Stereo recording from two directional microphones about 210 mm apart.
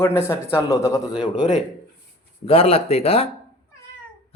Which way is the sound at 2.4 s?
25° left (ahead or behind).